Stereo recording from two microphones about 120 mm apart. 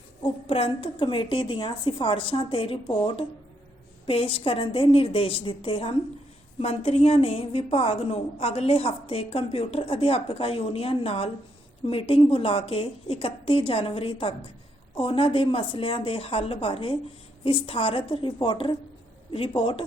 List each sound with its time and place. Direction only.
0.2 s a woman's voice: 55° left (ahead or behind)